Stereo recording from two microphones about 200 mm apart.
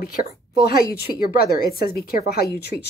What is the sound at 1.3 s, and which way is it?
A woman's voice, 50° left (ahead or behind).